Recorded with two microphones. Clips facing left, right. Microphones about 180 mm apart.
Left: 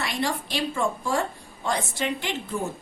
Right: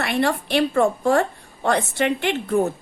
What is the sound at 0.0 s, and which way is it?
A woman's voice, 60° right (ahead or behind).